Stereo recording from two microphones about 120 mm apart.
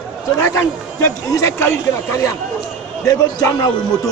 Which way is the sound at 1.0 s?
25° left (ahead or behind).